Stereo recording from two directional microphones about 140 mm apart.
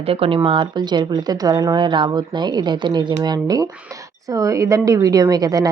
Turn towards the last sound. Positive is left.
turn(degrees=-25)  # may be behind; listen again after turning